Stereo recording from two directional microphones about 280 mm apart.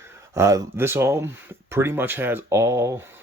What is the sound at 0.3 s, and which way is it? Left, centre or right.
Speech, centre.